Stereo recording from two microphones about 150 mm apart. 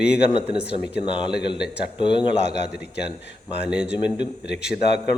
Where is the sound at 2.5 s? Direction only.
90° left.